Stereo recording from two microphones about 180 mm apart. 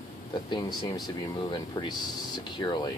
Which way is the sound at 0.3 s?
25° left (ahead or behind).